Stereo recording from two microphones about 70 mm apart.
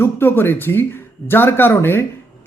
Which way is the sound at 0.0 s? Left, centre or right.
Left.